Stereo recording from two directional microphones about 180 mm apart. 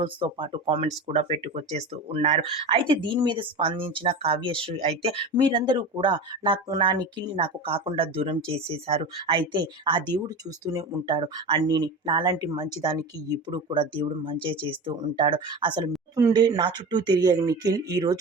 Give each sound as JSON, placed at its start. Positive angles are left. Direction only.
{"t": 0.0, "sound": "speech", "side_deg": -25}